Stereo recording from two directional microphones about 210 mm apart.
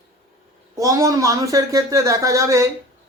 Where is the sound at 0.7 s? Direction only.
15° right (ahead or behind).